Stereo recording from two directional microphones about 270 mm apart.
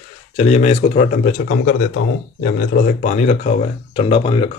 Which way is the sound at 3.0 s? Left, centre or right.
Left.